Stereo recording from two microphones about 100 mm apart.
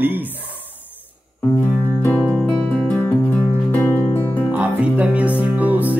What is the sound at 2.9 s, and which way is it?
Music, 15° left (ahead or behind).